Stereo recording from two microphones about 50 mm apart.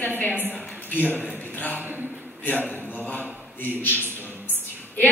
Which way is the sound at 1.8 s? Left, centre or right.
Right.